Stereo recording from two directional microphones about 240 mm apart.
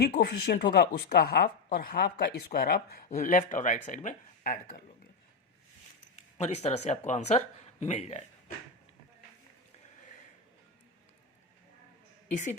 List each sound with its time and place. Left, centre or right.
0.0 s speech: left
6.3 s speech: left